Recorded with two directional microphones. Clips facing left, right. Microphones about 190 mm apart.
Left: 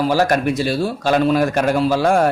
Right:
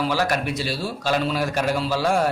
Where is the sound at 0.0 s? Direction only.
45° left (ahead or behind).